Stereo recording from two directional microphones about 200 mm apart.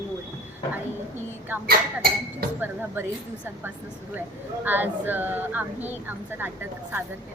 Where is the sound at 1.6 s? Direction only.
45° right (ahead or behind).